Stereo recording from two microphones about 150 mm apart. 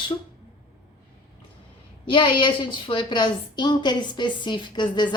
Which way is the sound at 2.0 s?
35° left (ahead or behind).